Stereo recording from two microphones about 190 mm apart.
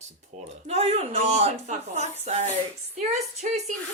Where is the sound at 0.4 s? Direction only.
35° right (ahead or behind).